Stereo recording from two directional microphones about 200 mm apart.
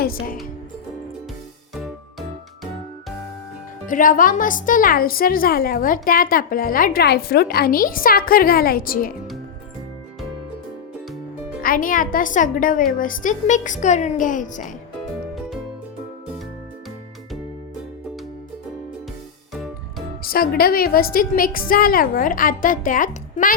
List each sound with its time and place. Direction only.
0.0 s a woman's voice: 45° left (ahead or behind)
1.7 s music: centre (ahead or behind)
3.8 s a woman's voice: 40° left (ahead or behind)
11.6 s a woman's voice: 45° left (ahead or behind)
20.2 s a woman's voice: 45° left (ahead or behind)